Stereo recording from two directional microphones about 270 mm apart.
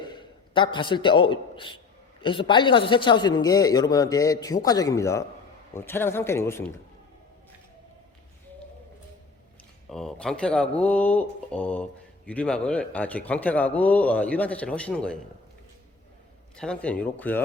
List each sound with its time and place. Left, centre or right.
0.0 s a man's voice: centre
9.9 s speech: centre
16.6 s speech: centre